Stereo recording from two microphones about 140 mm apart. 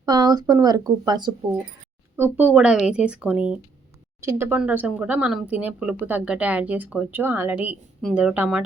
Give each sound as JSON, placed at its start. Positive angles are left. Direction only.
{"t": 0.0, "sound": "speech", "side_deg": -30}
{"t": 2.1, "sound": "a woman's voice", "side_deg": -15}
{"t": 4.2, "sound": "a woman's voice", "side_deg": -20}